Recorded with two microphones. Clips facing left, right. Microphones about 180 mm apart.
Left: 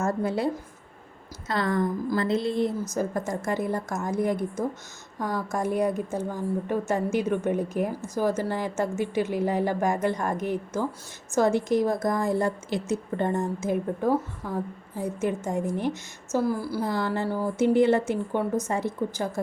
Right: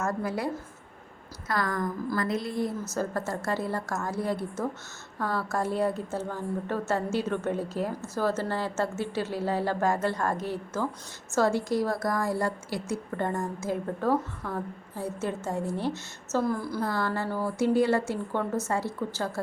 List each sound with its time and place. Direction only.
0.0 s a woman's voice: 25° left (ahead or behind)
16.4 s a woman's voice: 5° left (ahead or behind)
16.8 s a woman's voice: 20° left (ahead or behind)